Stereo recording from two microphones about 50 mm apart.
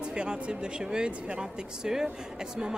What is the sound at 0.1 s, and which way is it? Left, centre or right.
Speech, centre.